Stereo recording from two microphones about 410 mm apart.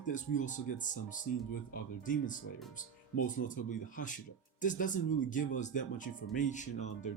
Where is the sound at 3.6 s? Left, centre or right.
Centre.